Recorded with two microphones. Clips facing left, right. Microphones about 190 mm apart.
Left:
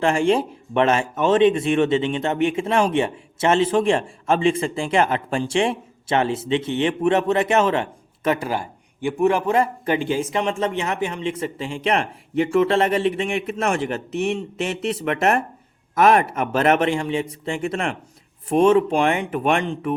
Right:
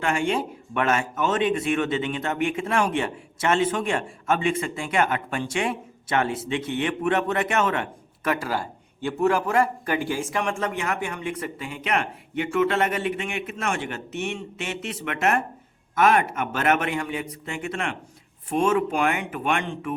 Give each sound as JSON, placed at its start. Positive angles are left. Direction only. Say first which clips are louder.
{"t": 0.0, "sound": "speech", "louder": "left 6 dB", "side_deg": 30}